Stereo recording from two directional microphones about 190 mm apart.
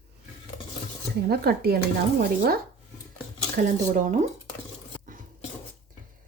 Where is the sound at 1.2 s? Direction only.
55° right (ahead or behind).